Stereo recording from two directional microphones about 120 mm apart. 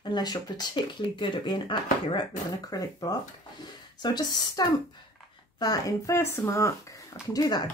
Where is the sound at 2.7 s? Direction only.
30° left (ahead or behind).